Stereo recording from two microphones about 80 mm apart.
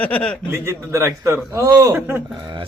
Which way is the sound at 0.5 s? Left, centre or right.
Right.